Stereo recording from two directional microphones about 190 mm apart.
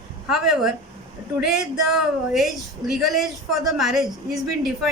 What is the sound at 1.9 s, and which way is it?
A woman's voice, centre (ahead or behind).